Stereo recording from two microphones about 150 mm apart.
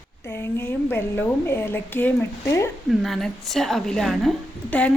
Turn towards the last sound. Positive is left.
turn(degrees=10)  # may be behind; listen again after turning